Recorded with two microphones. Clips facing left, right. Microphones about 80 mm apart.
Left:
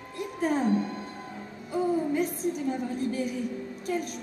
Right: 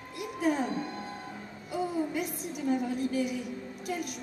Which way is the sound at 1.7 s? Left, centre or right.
Left.